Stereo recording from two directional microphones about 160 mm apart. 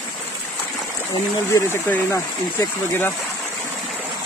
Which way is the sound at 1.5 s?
15° left (ahead or behind).